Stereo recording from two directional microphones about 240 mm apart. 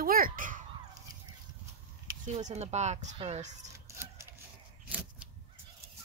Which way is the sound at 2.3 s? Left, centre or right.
Right.